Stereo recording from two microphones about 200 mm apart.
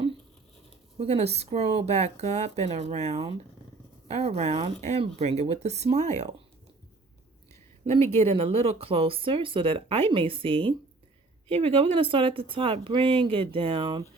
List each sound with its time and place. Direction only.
0.9 s speech: 30° right (ahead or behind)
8.1 s speech: 30° right (ahead or behind)